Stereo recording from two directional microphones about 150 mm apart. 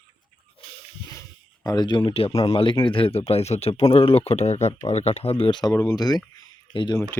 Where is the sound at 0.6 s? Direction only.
40° left (ahead or behind).